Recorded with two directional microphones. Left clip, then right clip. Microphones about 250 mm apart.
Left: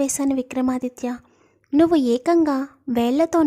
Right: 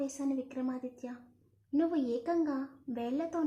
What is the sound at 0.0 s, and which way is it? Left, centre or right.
A woman's voice, left.